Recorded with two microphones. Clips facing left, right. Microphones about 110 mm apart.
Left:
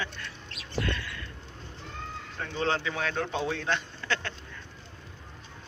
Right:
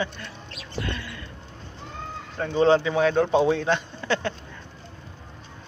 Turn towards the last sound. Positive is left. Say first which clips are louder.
# right 7 dB
turn(degrees=-15)  # may be behind; listen again after turning